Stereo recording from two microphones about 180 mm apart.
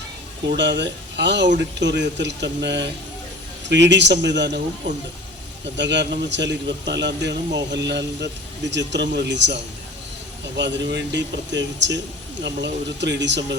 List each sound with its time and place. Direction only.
0.5 s speech: 75° right (ahead or behind)
5.7 s speech: 75° right (ahead or behind)